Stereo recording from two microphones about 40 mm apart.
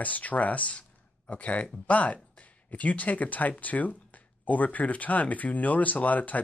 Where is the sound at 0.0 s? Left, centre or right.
Left.